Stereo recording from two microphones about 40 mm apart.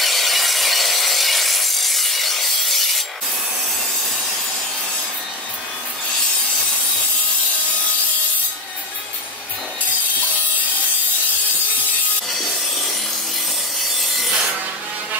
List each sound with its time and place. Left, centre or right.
0.0 s sawing: centre
12.3 s rub: centre
13.9 s wood: centre